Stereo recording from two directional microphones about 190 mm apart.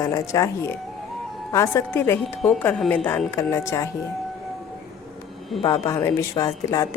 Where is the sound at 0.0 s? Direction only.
15° left (ahead or behind).